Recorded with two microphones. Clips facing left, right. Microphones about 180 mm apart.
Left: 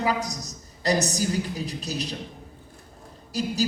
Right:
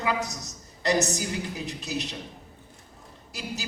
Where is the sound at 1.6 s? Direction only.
35° left (ahead or behind).